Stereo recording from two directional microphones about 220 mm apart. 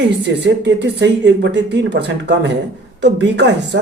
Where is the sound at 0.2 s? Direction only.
50° right (ahead or behind).